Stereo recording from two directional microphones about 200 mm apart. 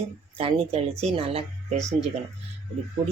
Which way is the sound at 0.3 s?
30° right (ahead or behind).